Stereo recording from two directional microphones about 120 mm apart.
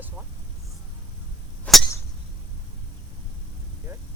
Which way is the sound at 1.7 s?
5° left (ahead or behind).